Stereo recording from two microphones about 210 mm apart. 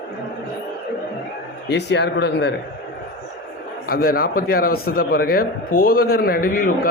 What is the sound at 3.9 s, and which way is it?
A man's voice, 45° left (ahead or behind).